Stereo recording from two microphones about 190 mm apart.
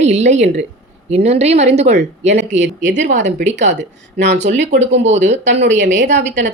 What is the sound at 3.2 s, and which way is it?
Speech, 40° right (ahead or behind).